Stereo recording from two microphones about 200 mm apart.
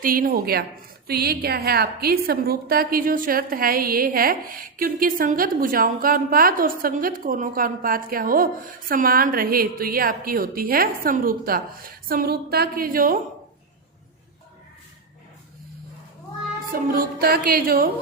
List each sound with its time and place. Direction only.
0.0 s a woman's voice: 45° right (ahead or behind)
16.7 s a woman's voice: 45° right (ahead or behind)